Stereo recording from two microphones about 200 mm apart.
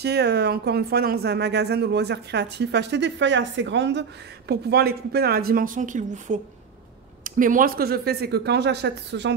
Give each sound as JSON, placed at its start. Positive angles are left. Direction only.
{"t": 0.0, "sound": "speech", "side_deg": -55}
{"t": 4.5, "sound": "speech", "side_deg": -55}